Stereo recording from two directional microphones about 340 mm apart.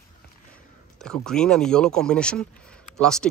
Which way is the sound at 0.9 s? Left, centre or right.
Centre.